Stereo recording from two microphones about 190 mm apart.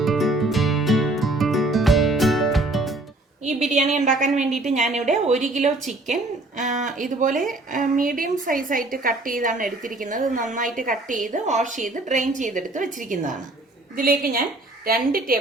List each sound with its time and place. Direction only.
0.0 s music: centre (ahead or behind)
3.4 s a woman's voice: 35° right (ahead or behind)